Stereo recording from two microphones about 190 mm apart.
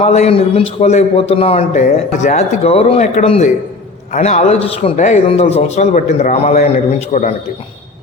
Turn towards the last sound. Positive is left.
turn(degrees=35)  # may be behind; listen again after turning